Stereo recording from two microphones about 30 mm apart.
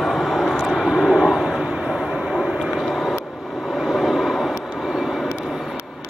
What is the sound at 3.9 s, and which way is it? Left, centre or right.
Vehicle, centre.